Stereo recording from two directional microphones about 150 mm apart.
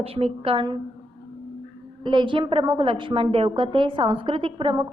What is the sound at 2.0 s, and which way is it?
A woman's voice, 30° right (ahead or behind).